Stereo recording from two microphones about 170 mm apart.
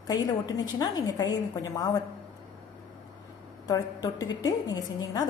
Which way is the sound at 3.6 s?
20° left (ahead or behind).